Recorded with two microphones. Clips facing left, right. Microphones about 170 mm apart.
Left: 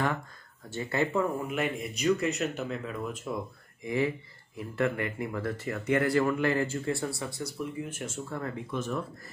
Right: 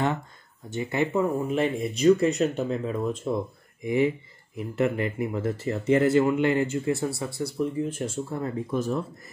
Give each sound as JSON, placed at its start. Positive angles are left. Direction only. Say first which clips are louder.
{"t": 0.7, "sound": "speech", "louder": "right 3 dB", "side_deg": -20}
{"t": 1.5, "sound": "speech", "louder": "right 6 dB", "side_deg": -30}
{"t": 3.8, "sound": "speech", "louder": "right 5 dB", "side_deg": -20}
{"t": 8.6, "sound": "speech", "louder": "right 6 dB", "side_deg": -35}